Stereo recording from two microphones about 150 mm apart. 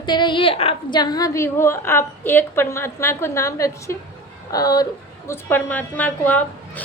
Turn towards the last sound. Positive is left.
turn(degrees=10)  # may be behind; listen again after turning